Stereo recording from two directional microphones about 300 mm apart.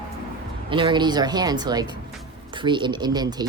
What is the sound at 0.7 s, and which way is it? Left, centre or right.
Speech, centre.